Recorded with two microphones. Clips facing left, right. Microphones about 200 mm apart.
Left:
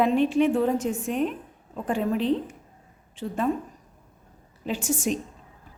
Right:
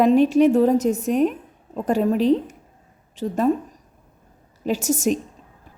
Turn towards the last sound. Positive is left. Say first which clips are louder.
# right 6 dB
turn(degrees=-40)  # may be behind; listen again after turning